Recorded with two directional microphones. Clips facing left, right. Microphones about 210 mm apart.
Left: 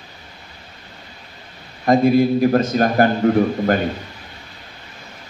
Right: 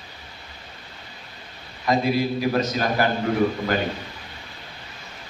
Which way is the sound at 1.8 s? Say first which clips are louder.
Left 8 dB; 50° left (ahead or behind).